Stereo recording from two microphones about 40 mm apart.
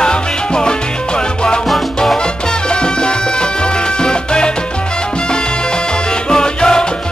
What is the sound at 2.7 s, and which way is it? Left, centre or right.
Music, left.